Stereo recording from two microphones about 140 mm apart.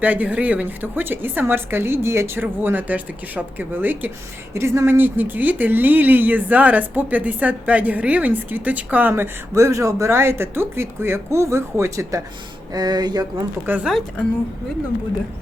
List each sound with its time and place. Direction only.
0.0 s speech: 10° right (ahead or behind)
12.7 s a sound: 30° right (ahead or behind)
13.7 s speech: 10° right (ahead or behind)